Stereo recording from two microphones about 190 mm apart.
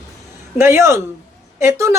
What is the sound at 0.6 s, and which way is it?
Speech, 15° right (ahead or behind).